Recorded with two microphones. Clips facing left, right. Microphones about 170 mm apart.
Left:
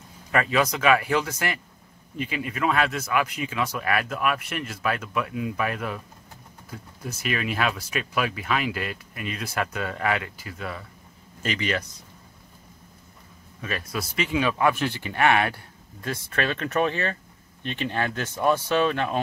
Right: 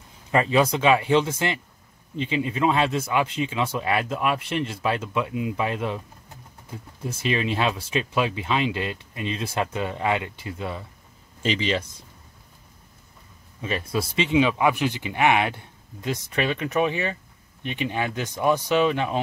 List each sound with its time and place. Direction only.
0.3 s speech: 25° right (ahead or behind)
13.6 s speech: 25° right (ahead or behind)